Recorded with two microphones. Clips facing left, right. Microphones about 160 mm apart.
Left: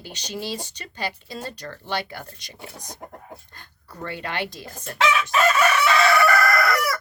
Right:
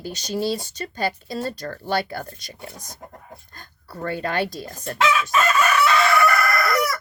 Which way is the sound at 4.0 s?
40° right (ahead or behind).